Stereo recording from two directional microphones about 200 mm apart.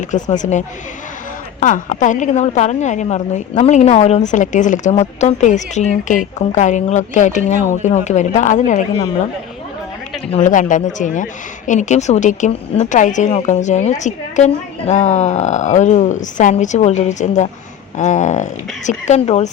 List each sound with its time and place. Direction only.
0.1 s a woman's voice: 35° left (ahead or behind)
1.6 s a woman's voice: 40° left (ahead or behind)
10.3 s a woman's voice: 40° left (ahead or behind)